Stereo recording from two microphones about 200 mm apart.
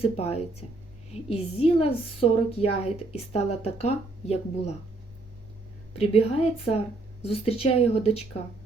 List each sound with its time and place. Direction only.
0.0 s a woman's voice: 30° left (ahead or behind)
6.0 s a woman's voice: 30° left (ahead or behind)